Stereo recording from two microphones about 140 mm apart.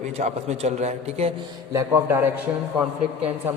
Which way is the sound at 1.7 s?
20° right (ahead or behind).